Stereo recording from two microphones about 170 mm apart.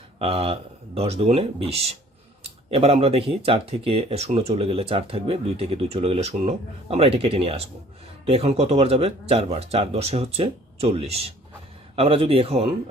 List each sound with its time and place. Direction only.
0.2 s speech: 35° right (ahead or behind)